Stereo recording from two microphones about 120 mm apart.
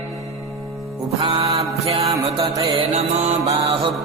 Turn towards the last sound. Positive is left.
turn(degrees=-60)  # may be behind; listen again after turning